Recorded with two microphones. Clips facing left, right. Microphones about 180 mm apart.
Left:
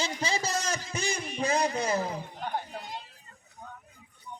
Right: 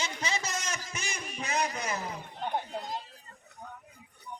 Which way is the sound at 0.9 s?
30° left (ahead or behind).